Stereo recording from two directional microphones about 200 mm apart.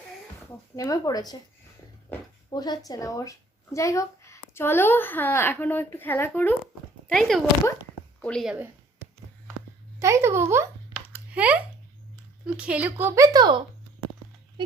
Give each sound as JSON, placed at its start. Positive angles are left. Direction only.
{"t": 0.8, "sound": "speech", "side_deg": 20}
{"t": 2.1, "sound": "speech", "side_deg": 10}
{"t": 2.5, "sound": "speech", "side_deg": 20}
{"t": 10.0, "sound": "a woman's voice", "side_deg": -15}